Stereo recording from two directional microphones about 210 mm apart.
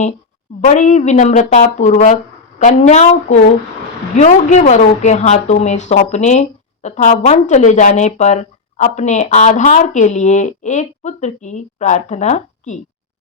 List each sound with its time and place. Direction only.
0.6 s a woman's voice: 35° left (ahead or behind)